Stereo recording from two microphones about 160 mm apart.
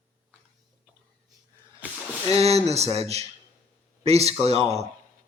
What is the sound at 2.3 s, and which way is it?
Speech, 40° right (ahead or behind).